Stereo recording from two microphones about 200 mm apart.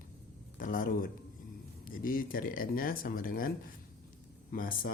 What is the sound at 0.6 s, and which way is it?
Speech, 40° left (ahead or behind).